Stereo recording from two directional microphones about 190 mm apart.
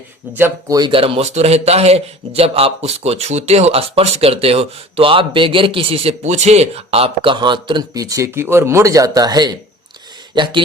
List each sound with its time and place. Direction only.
0.3 s a man's voice: 15° right (ahead or behind)